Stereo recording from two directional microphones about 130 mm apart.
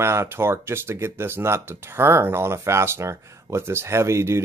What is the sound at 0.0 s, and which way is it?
Speech, 20° right (ahead or behind).